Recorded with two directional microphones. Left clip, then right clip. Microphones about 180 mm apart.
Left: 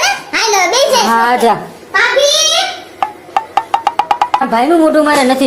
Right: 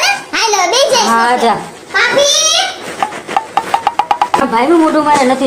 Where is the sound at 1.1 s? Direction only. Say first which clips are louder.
Even; 40° left (ahead or behind).